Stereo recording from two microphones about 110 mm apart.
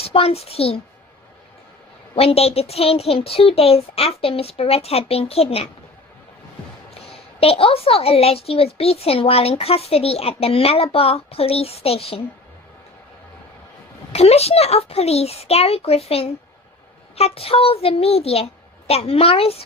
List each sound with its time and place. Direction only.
0.0 s a child's voice: 60° left (ahead or behind)
2.1 s a woman's voice: 65° left (ahead or behind)
6.9 s a woman's voice: 65° left (ahead or behind)
14.1 s a child's voice: 70° left (ahead or behind)